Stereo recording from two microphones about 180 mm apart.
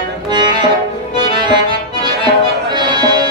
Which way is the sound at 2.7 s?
25° right (ahead or behind).